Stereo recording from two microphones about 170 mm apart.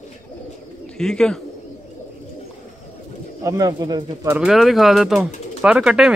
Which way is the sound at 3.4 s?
20° right (ahead or behind).